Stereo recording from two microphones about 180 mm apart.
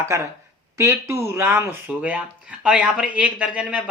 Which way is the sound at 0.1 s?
15° right (ahead or behind).